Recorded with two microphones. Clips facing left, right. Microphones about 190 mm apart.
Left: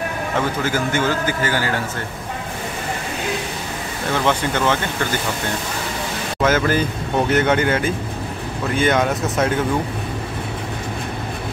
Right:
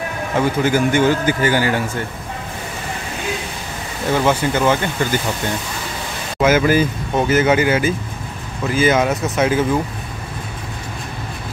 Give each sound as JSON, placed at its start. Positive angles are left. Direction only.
{"t": 0.7, "sound": "a man's voice", "side_deg": -15}
{"t": 4.2, "sound": "a man's voice", "side_deg": -10}
{"t": 6.4, "sound": "speech", "side_deg": -10}